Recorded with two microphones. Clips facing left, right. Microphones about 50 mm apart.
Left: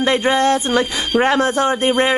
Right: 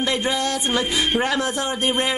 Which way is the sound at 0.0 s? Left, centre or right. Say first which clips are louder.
Left 7 dB; left.